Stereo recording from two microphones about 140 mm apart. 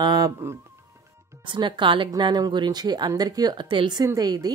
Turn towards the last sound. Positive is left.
turn(degrees=-30)  # may be behind; listen again after turning